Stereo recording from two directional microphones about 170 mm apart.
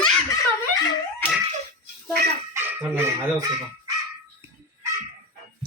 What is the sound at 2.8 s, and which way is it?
Speech, 10° right (ahead or behind).